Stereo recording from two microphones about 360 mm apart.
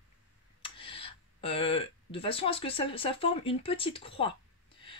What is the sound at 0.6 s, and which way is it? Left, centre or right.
Speech, centre.